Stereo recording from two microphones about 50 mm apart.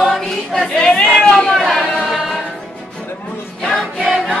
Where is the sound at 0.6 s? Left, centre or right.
Centre.